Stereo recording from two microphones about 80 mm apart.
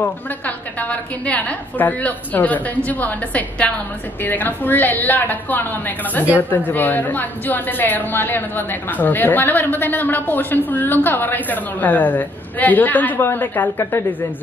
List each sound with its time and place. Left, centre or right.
0.0 s a woman's voice: left